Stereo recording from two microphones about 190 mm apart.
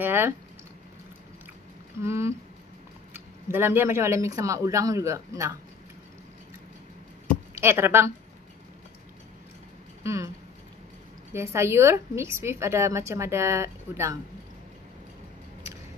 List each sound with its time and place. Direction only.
0.0 s a woman's voice: 10° right (ahead or behind)
2.0 s a woman's voice: 15° right (ahead or behind)
7.5 s a woman's voice: 15° right (ahead or behind)
10.0 s a woman's voice: 15° right (ahead or behind)
11.3 s a woman's voice: 15° right (ahead or behind)